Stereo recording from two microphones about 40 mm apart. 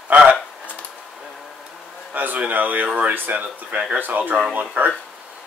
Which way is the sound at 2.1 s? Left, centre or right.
Right.